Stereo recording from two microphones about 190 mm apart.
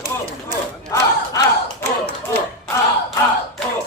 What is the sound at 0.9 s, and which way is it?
Battle cry, 15° left (ahead or behind).